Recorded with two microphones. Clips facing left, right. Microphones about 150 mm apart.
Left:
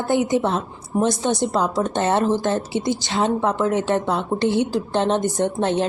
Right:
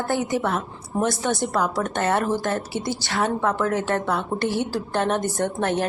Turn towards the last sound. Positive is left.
turn(degrees=20)  # may be behind; listen again after turning